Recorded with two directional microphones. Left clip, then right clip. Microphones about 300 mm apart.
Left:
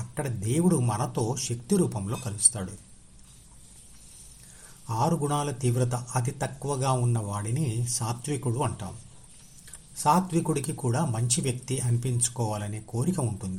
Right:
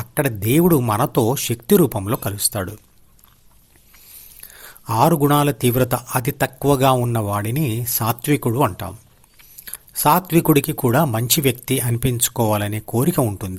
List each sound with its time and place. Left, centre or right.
0.1 s a man's voice: right
4.9 s a man's voice: right